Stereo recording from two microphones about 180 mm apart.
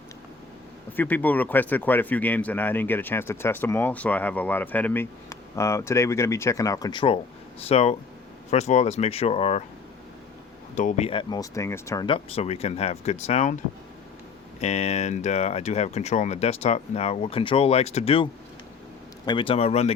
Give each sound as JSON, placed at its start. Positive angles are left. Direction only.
{"t": 0.9, "sound": "speech", "side_deg": 10}
{"t": 10.8, "sound": "speech", "side_deg": 40}
{"t": 12.0, "sound": "speech", "side_deg": 30}
{"t": 14.6, "sound": "speech", "side_deg": 35}